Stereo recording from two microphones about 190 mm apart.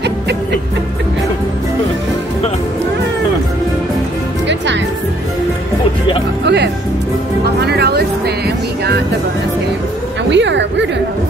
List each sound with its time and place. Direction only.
4.5 s music: 70° right (ahead or behind)
6.4 s music: 60° right (ahead or behind)
10.3 s a sound: 70° right (ahead or behind)